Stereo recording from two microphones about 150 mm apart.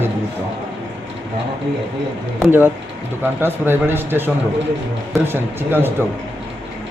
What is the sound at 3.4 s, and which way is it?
A man's voice, 15° right (ahead or behind).